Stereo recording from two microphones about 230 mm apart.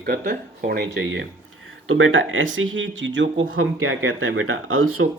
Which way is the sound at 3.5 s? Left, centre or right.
Right.